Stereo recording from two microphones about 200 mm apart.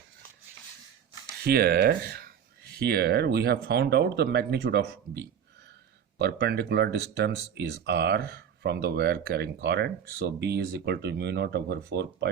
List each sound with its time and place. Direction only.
1.4 s speech: 50° right (ahead or behind)